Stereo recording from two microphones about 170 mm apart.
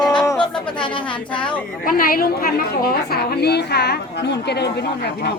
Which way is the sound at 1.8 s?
55° left (ahead or behind).